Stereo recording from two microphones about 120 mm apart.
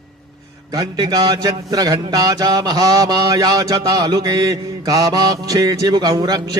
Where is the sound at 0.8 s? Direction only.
35° right (ahead or behind).